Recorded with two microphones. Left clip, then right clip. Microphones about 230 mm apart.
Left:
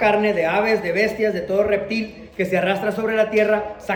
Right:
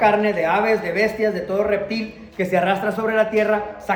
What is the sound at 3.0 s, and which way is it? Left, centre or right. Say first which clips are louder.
Speech: left 2 dB; right.